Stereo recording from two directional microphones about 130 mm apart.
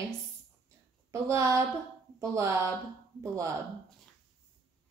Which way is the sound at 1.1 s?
25° right (ahead or behind).